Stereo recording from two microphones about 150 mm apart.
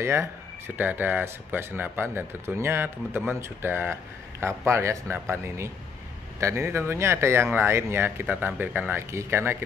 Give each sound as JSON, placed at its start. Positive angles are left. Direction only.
{"t": 0.0, "sound": "speech", "side_deg": -15}